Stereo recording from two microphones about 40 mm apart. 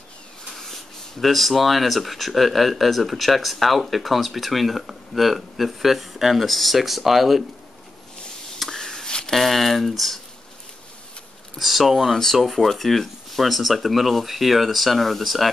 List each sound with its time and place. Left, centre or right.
1.2 s speech: centre
8.5 s a sound: centre
9.3 s speech: centre
11.5 s speech: centre
12.0 s speech: centre